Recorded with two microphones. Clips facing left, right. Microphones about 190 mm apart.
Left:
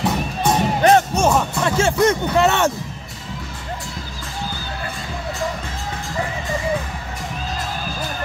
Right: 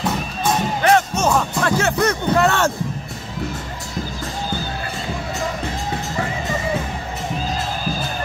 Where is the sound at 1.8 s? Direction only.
25° left (ahead or behind).